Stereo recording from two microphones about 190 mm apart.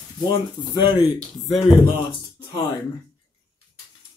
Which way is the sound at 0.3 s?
25° left (ahead or behind).